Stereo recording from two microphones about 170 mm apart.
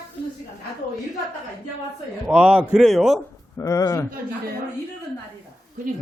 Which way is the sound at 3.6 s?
20° left (ahead or behind).